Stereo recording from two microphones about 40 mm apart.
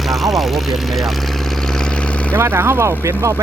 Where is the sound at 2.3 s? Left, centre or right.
Right.